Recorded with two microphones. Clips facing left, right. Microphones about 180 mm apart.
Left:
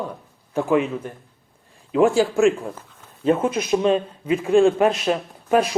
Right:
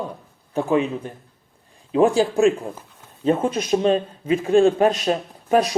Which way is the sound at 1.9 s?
20° right (ahead or behind).